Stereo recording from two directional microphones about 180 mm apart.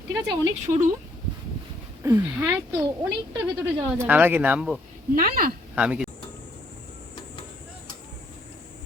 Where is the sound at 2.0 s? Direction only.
15° right (ahead or behind).